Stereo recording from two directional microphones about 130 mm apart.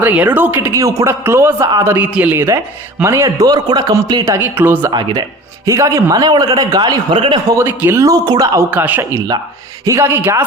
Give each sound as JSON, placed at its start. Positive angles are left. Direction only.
{"t": 0.0, "sound": "a man's voice", "side_deg": -15}
{"t": 4.3, "sound": "a man's voice", "side_deg": -15}
{"t": 4.9, "sound": "speech", "side_deg": -35}
{"t": 5.6, "sound": "a man's voice", "side_deg": -25}
{"t": 7.5, "sound": "a man's voice", "side_deg": -15}
{"t": 8.5, "sound": "a man's voice", "side_deg": -15}